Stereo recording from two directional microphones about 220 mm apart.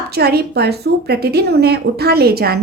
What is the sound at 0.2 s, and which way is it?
A woman's voice, 45° right (ahead or behind).